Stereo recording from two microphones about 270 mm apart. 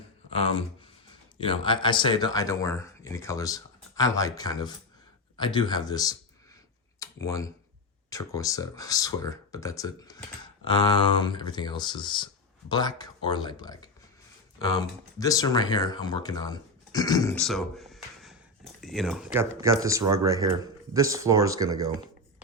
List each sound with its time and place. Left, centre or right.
1.4 s speech: centre